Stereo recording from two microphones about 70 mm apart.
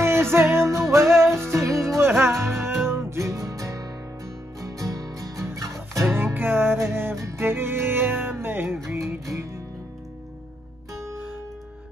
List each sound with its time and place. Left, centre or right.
0.0 s music: right
7.2 s music: right
7.4 s music: right
8.8 s music: right